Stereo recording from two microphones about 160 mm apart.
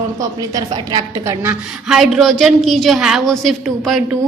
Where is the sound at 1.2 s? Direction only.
15° right (ahead or behind).